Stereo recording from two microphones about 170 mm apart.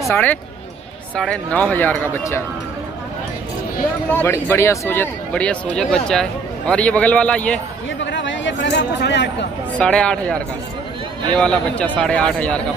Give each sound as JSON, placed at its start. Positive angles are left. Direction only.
{"t": 0.1, "sound": "speech", "side_deg": 10}
{"t": 4.1, "sound": "speech", "side_deg": 15}
{"t": 8.0, "sound": "a sound", "side_deg": 90}
{"t": 9.8, "sound": "speech", "side_deg": 5}